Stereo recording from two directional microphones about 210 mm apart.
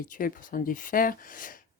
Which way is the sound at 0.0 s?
40° left (ahead or behind).